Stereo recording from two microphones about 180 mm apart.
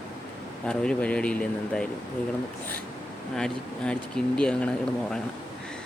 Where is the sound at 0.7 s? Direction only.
5° left (ahead or behind).